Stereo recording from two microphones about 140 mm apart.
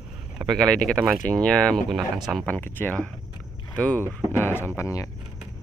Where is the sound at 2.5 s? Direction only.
15° left (ahead or behind).